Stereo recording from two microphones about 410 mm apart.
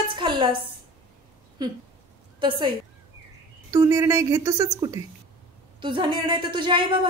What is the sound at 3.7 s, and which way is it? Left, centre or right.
A man's voice, centre.